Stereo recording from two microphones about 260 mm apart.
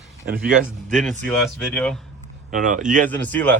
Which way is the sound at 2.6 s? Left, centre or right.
Right.